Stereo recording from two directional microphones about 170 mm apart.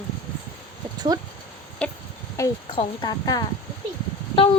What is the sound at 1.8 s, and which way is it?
Speech, 5° left (ahead or behind).